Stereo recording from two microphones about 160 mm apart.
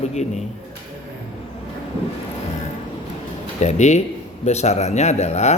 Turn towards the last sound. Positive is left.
turn(degrees=45)  # may be behind; listen again after turning